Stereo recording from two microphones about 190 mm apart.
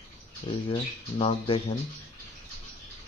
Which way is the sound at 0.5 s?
30° left (ahead or behind).